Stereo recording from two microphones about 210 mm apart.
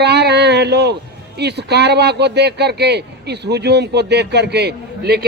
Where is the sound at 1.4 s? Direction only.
50° right (ahead or behind).